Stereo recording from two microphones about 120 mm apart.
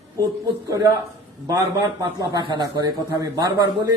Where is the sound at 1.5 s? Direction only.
30° right (ahead or behind).